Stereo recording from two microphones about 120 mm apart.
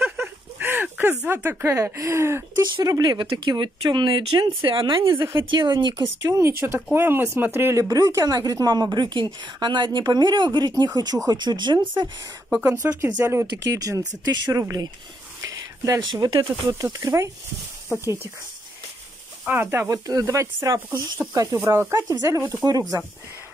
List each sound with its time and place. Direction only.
0.0 s a sound: 15° right (ahead or behind)
2.6 s a woman's voice: 35° right (ahead or behind)
5.9 s speech: 20° right (ahead or behind)
7.9 s a woman's voice: 30° right (ahead or behind)
12.6 s speech: 25° right (ahead or behind)
19.4 s a woman's voice: 15° right (ahead or behind)